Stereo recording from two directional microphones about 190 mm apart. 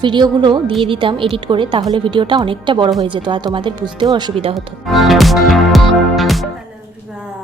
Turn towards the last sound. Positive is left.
turn(degrees=0)  # may be behind; listen again after turning